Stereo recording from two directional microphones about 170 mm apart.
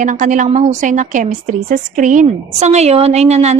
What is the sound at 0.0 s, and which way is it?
Speech, 50° right (ahead or behind).